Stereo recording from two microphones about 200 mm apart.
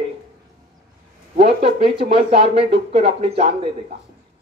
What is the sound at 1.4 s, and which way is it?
Speech, 30° right (ahead or behind).